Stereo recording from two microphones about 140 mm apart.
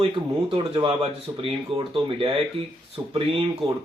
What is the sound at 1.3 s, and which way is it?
Speech, 25° right (ahead or behind).